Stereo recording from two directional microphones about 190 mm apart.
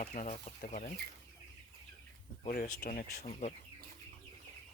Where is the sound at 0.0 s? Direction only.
40° left (ahead or behind).